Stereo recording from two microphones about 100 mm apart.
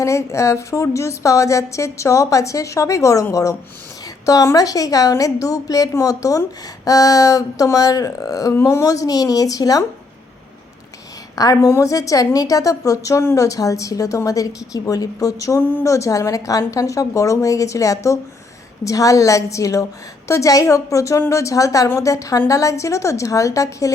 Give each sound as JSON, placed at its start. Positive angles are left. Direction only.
{"t": 0.0, "sound": "a woman's voice", "side_deg": 30}
{"t": 4.3, "sound": "a woman's voice", "side_deg": 35}
{"t": 11.3, "sound": "a woman's voice", "side_deg": 40}